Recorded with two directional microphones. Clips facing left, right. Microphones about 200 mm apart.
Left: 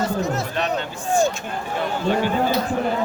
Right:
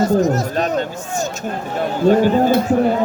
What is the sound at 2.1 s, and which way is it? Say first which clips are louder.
Speech: right 8 dB; 45° right (ahead or behind).